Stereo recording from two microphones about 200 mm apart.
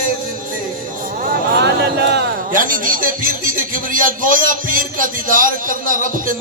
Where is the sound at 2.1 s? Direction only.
45° right (ahead or behind).